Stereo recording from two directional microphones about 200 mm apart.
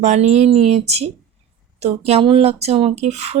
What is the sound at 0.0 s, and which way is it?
A woman's voice, 35° right (ahead or behind).